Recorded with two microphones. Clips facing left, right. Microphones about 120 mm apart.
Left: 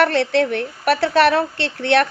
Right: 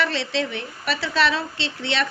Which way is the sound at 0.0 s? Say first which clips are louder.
Left 8 dB; 55° left (ahead or behind).